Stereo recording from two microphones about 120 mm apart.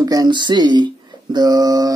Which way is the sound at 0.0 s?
35° right (ahead or behind).